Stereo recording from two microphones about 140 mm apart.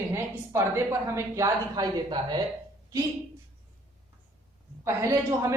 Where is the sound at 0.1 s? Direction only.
20° right (ahead or behind).